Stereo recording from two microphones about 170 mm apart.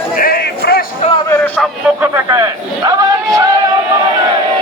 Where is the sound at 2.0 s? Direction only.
15° right (ahead or behind).